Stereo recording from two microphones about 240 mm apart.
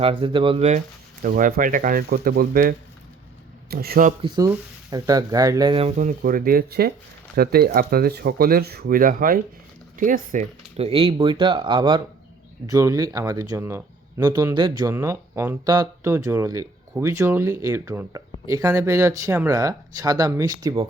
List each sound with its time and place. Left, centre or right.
0.0 s speech: right
1.2 s speech: right
4.2 s speech: centre